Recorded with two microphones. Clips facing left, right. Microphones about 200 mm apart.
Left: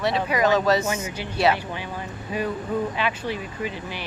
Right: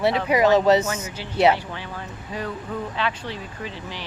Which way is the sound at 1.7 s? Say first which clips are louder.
Left 2 dB; 15° left (ahead or behind).